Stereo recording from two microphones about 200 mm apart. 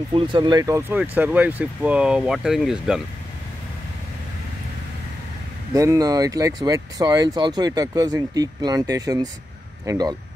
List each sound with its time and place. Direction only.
0.1 s speech: 25° right (ahead or behind); by 3.0 s centre (ahead or behind)
5.7 s speech: 15° right (ahead or behind)